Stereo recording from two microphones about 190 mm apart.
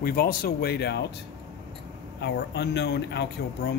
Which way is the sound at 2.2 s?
60° left (ahead or behind).